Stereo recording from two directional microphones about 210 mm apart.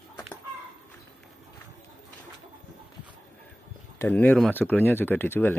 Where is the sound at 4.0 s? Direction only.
10° left (ahead or behind).